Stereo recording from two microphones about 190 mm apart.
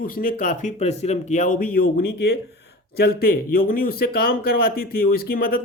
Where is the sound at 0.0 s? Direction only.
45° left (ahead or behind).